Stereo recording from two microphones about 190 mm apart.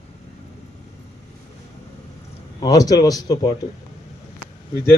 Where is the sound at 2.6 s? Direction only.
20° left (ahead or behind).